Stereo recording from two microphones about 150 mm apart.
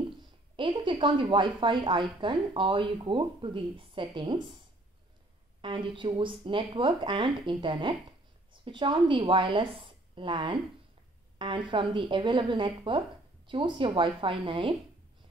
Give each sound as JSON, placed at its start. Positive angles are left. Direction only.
{"t": 0.6, "sound": "a woman's voice", "side_deg": -35}
{"t": 5.6, "sound": "a woman's voice", "side_deg": -35}